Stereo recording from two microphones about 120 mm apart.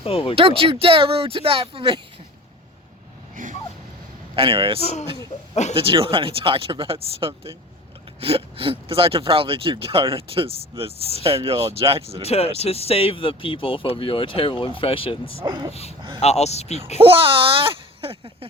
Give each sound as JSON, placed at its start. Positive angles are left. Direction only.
{"t": 0.0, "sound": "speech", "side_deg": 50}
{"t": 0.3, "sound": "speech", "side_deg": -50}
{"t": 3.4, "sound": "dog", "side_deg": -90}
{"t": 4.4, "sound": "speech", "side_deg": -50}
{"t": 4.8, "sound": "speech", "side_deg": 65}
{"t": 5.7, "sound": "speech", "side_deg": -50}
{"t": 12.3, "sound": "speech", "side_deg": 55}
{"t": 15.4, "sound": "speech", "side_deg": -35}
{"t": 15.7, "sound": "speech", "side_deg": 60}
{"t": 17.0, "sound": "speech", "side_deg": -50}